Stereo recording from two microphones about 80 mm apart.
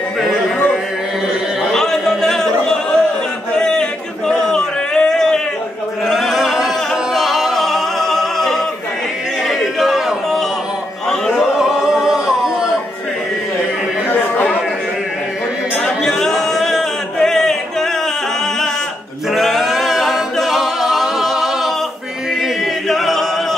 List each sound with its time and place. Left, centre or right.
1.7 s a sound: centre
6.0 s chant: centre
7.2 s music: centre
11.3 s singing: centre
14.0 s chatter: left
15.8 s chant: centre
19.3 s a capella: centre
22.8 s a capella: centre